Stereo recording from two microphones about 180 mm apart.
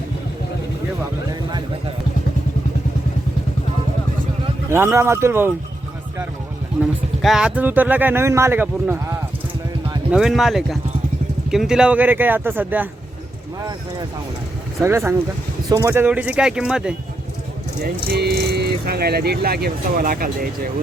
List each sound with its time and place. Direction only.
4.7 s speech: 15° right (ahead or behind)
7.2 s speech: centre (ahead or behind)
10.1 s speech: centre (ahead or behind)
14.8 s speech: 15° right (ahead or behind)
17.8 s speech: 65° right (ahead or behind)